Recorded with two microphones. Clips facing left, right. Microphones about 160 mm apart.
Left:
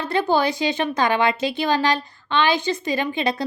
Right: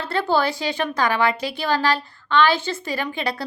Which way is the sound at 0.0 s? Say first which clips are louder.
Left 1 dB; 15° left (ahead or behind).